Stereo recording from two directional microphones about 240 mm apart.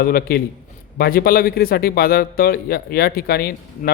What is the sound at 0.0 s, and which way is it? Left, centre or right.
Speech, left.